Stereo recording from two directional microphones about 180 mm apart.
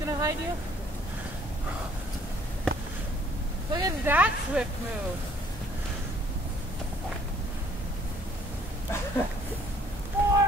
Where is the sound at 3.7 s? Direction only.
20° right (ahead or behind).